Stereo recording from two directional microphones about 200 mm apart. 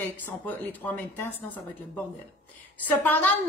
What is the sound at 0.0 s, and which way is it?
A woman's voice, 10° left (ahead or behind).